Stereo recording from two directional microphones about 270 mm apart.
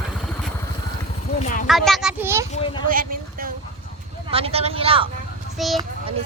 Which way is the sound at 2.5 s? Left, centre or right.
Left.